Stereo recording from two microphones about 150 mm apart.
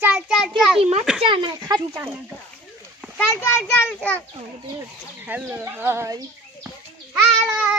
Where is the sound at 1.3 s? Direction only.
35° right (ahead or behind).